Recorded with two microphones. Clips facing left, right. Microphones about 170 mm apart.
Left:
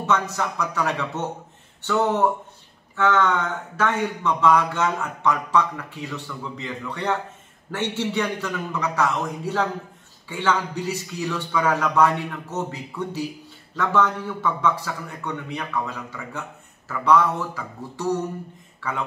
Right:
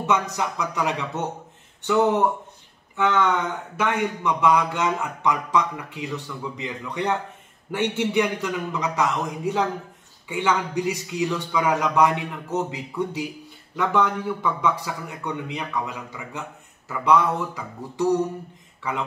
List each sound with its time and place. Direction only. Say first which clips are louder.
0.0 s a man's voice: even; 15° right (ahead or behind)
3.0 s a man's voice: left 1 dB; 15° right (ahead or behind)